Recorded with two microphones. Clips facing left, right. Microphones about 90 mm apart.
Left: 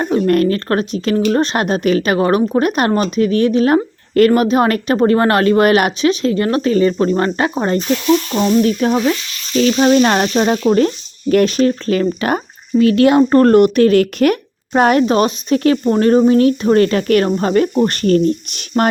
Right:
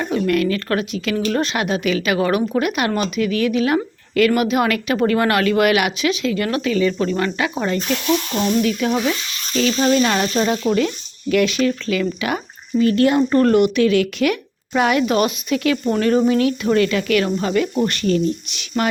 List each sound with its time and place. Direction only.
0.0 s speech: 40° left (ahead or behind)
12.8 s speech: 90° left
13.3 s a woman's voice: 45° left (ahead or behind)